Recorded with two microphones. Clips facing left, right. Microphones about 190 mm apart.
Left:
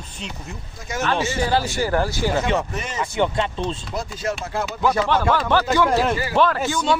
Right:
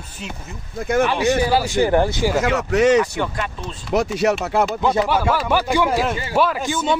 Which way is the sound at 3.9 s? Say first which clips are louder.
Right 8 dB; 75° right (ahead or behind).